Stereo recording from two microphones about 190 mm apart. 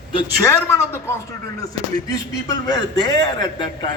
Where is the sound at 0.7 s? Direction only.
10° left (ahead or behind).